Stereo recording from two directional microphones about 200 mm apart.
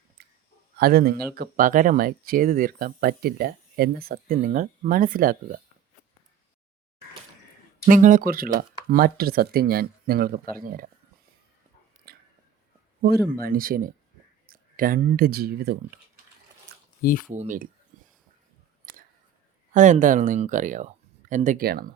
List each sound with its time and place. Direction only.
0.8 s speech: 50° right (ahead or behind)
7.9 s speech: 40° right (ahead or behind)
12.1 s chewing: 50° right (ahead or behind)
13.4 s speech: 45° right (ahead or behind)
17.0 s speech: 45° left (ahead or behind)
17.3 s speech: 35° right (ahead or behind)
17.9 s a sound: 40° right (ahead or behind)
19.7 s speech: 40° right (ahead or behind)